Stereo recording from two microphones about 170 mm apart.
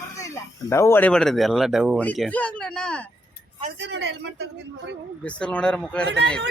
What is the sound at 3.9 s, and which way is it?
Speech, 90° right.